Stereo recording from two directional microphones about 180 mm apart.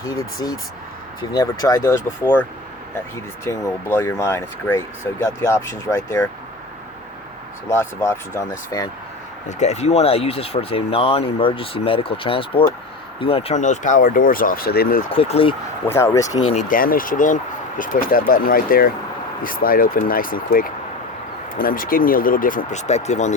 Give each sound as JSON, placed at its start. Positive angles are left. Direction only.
{"t": 0.0, "sound": "speech", "side_deg": 20}
{"t": 7.7, "sound": "speech", "side_deg": 15}
{"t": 9.5, "sound": "speech", "side_deg": 40}
{"t": 15.1, "sound": "speech", "side_deg": 30}
{"t": 15.9, "sound": "speech", "side_deg": 15}
{"t": 16.5, "sound": "speech", "side_deg": 45}